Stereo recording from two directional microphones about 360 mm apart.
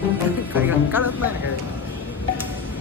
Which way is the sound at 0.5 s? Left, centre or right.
Centre.